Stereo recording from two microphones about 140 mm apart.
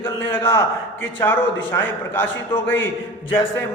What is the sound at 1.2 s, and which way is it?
A man's voice, 15° left (ahead or behind).